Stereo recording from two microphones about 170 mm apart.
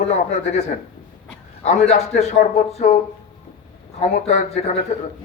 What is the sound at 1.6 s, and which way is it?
Speech, 40° left (ahead or behind).